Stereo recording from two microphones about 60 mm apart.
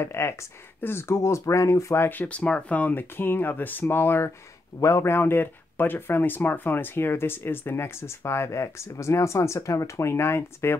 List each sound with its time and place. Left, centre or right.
0.0 s speech: left
2.0 s speech: left
4.7 s speech: left
5.0 s speech: left